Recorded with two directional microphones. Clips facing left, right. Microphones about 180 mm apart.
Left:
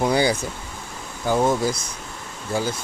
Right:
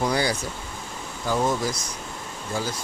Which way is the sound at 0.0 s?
25° left (ahead or behind).